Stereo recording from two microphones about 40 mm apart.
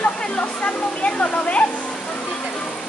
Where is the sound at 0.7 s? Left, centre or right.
Left.